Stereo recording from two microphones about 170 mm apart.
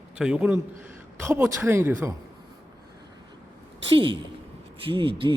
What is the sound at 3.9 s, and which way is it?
A woman's voice, 30° right (ahead or behind).